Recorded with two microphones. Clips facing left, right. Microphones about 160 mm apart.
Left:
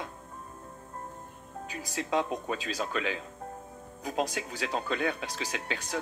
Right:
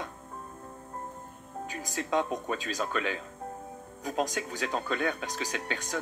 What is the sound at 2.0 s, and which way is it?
Speech, 40° right (ahead or behind).